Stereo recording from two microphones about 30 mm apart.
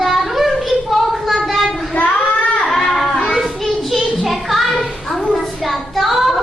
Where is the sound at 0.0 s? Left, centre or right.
Centre.